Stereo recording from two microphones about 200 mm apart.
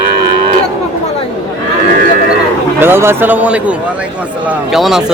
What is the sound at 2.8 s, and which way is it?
Speech, 10° right (ahead or behind).